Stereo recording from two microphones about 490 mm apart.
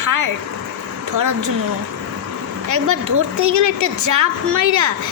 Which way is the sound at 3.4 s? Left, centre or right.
Right.